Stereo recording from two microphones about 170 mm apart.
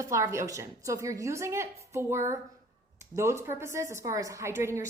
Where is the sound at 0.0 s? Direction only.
15° right (ahead or behind).